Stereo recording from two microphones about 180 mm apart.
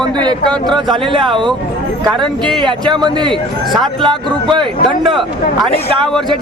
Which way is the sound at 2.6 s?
25° right (ahead or behind).